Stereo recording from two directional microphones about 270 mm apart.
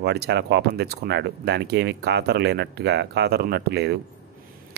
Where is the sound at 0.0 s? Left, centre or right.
Right.